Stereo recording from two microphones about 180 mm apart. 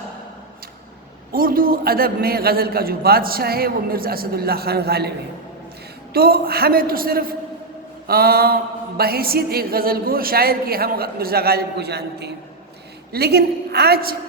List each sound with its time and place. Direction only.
1.3 s a man's voice: 55° right (ahead or behind)
6.1 s a man's voice: 60° right (ahead or behind)